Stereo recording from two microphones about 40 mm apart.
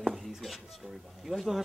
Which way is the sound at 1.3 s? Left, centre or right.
Centre.